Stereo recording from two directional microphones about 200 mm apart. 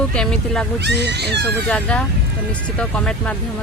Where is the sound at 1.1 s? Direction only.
55° right (ahead or behind).